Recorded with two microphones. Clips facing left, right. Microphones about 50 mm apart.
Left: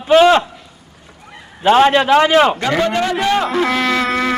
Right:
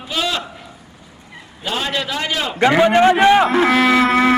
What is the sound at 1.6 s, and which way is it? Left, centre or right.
Speech, left.